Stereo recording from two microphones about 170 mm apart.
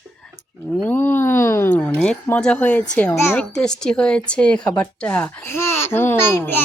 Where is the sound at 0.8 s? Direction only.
10° left (ahead or behind).